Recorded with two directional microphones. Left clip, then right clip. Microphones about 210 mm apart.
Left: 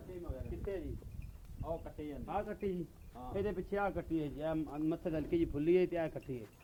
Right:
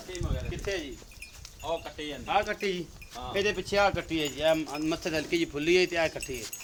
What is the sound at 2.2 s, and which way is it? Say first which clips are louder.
Speech: right 12 dB; 10° right (ahead or behind).